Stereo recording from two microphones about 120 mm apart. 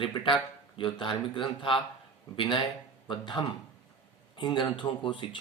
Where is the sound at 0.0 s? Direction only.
45° left (ahead or behind).